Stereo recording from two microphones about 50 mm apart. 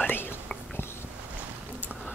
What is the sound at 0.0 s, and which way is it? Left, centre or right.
Whispering, left.